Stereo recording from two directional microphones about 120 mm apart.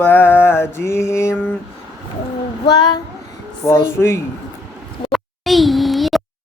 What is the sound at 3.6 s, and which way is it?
Speech, 30° left (ahead or behind).